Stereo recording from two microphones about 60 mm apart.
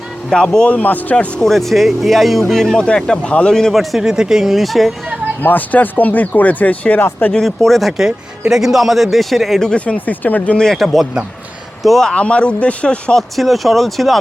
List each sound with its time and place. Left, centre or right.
0.4 s a man's voice: centre
0.8 s speech: left
1.4 s speech: centre
5.4 s speech: left
7.3 s speech: centre
9.6 s speech: centre
10.8 s speech: centre
12.1 s speech: centre
13.3 s speech: centre